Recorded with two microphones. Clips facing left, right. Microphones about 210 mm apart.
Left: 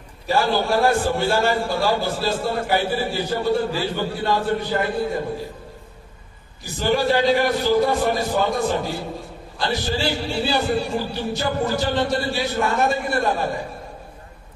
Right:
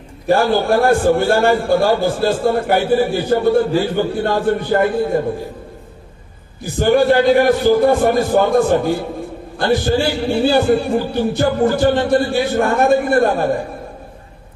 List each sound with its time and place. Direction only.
0.3 s a man's voice: 50° right (ahead or behind)
6.6 s a man's voice: 55° right (ahead or behind)